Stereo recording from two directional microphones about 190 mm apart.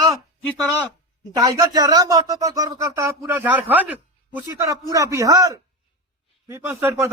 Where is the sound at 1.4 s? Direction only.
20° right (ahead or behind).